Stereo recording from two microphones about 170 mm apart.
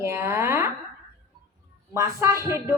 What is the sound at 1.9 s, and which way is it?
Speech, 15° right (ahead or behind).